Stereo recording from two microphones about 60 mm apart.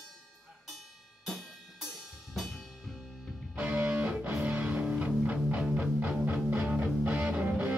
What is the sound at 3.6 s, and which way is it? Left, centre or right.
Music, right.